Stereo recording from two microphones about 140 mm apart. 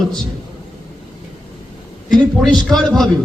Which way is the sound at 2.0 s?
Centre (ahead or behind).